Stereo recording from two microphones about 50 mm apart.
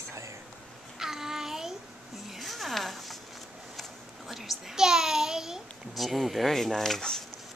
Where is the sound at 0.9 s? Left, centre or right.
Centre.